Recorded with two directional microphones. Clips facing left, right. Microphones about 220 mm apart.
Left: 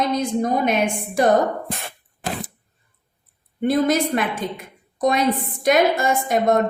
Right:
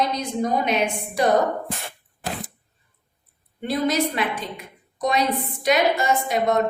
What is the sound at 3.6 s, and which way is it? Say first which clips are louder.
Speech: left 4 dB; 50° left (ahead or behind).